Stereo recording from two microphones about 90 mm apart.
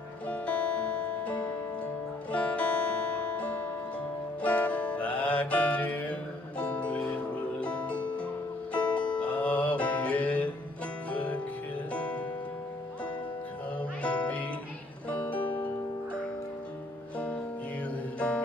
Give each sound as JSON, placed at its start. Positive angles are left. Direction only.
{"t": 0.3, "sound": "music", "side_deg": 15}
{"t": 13.7, "sound": "music", "side_deg": 15}
{"t": 17.8, "sound": "music", "side_deg": 15}